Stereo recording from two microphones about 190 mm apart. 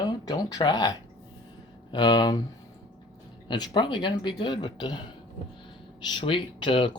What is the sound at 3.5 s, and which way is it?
Speech, 25° left (ahead or behind).